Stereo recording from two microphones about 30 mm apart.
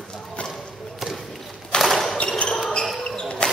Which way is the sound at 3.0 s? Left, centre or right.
Left.